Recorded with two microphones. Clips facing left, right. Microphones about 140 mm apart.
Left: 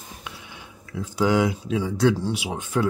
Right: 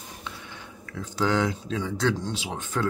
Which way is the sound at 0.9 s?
10° left (ahead or behind).